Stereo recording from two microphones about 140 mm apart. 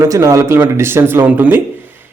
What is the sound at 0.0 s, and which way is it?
A man's voice, 20° right (ahead or behind).